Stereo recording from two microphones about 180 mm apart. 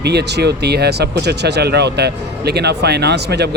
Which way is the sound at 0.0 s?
65° right (ahead or behind).